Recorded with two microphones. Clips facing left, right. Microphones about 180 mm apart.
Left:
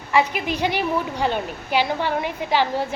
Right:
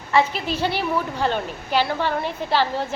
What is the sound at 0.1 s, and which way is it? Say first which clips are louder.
A woman's voice: even; 15° left (ahead or behind).